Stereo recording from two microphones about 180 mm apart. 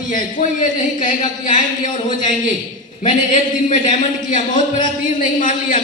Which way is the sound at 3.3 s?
45° left (ahead or behind).